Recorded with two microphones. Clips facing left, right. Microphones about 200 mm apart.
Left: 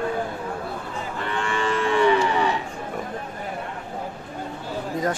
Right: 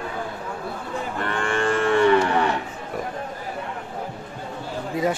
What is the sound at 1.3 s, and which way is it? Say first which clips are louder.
Livestock: right 2 dB; 50° right (ahead or behind).